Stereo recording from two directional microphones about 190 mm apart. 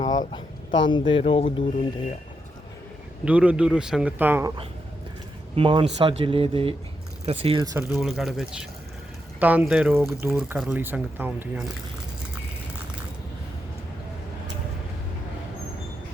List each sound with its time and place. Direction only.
0.0 s a sound: 20° left (ahead or behind)
0.9 s speech: 25° left (ahead or behind)
3.2 s speech: 5° right (ahead or behind)
5.5 s speech: 30° right (ahead or behind)
7.6 s speech: 20° right (ahead or behind)
7.9 s speech: centre (ahead or behind)